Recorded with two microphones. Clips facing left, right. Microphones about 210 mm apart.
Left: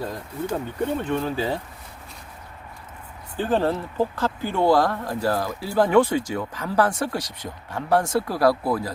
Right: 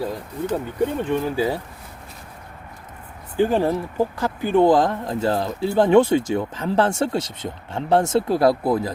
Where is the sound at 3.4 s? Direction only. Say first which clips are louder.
Right 3 dB; 15° right (ahead or behind).